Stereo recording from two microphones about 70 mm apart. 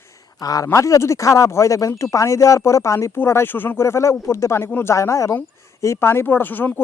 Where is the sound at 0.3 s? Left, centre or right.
Left.